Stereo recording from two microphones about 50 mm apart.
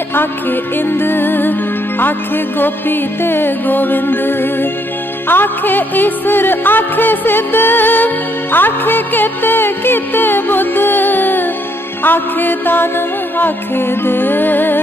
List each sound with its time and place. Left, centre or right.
0.1 s music: left